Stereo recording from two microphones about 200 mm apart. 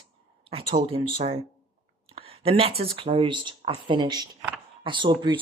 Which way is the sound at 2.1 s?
30° right (ahead or behind).